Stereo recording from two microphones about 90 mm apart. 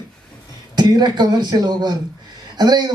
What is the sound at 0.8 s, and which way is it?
Speech, 55° right (ahead or behind).